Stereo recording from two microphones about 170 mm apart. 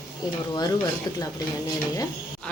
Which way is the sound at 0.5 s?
25° left (ahead or behind).